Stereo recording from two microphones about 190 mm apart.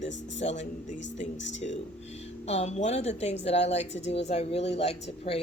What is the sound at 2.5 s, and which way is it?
A woman's voice, 35° left (ahead or behind).